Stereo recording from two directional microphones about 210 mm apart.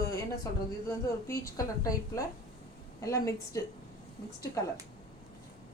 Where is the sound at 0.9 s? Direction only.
15° left (ahead or behind).